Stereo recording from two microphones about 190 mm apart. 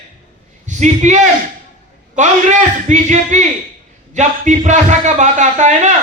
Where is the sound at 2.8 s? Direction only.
40° right (ahead or behind).